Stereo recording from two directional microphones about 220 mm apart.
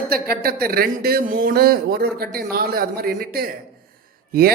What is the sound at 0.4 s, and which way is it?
Speech, 45° right (ahead or behind).